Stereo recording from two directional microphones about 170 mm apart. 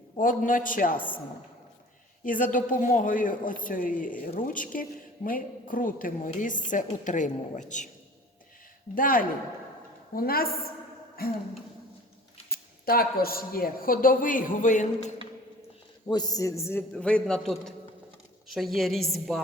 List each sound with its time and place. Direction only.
0.2 s a woman's voice: 50° left (ahead or behind)
0.9 s a man's voice: 10° left (ahead or behind)
2.2 s a woman's voice: 50° left (ahead or behind)
9.0 s speech: 55° left (ahead or behind)
12.5 s speech: 60° left (ahead or behind)
16.0 s a man's voice: 25° left (ahead or behind); by 19.4 s centre (ahead or behind)